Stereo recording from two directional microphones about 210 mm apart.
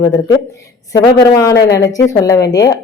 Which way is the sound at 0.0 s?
15° left (ahead or behind).